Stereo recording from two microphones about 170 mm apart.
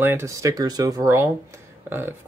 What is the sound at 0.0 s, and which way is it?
Speech, 15° right (ahead or behind).